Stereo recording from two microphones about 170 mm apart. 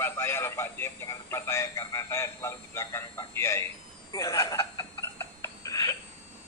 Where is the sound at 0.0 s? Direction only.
15° left (ahead or behind).